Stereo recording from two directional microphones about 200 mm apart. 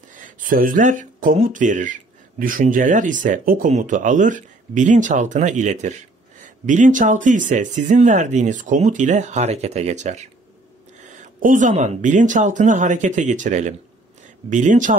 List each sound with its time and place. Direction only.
0.1 s speech: 40° right (ahead or behind)